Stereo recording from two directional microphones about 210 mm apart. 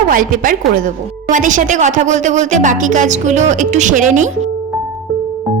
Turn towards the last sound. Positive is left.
turn(degrees=-35)  # may be behind; listen again after turning